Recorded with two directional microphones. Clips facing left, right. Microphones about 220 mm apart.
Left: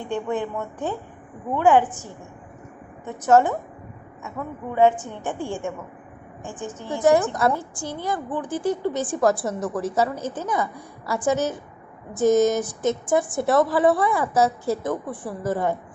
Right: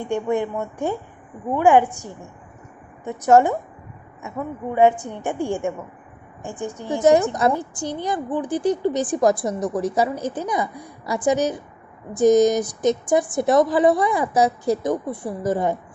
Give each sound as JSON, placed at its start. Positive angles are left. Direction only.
{"t": 0.0, "sound": "a woman's voice", "side_deg": -10}
{"t": 6.7, "sound": "a woman's voice", "side_deg": -15}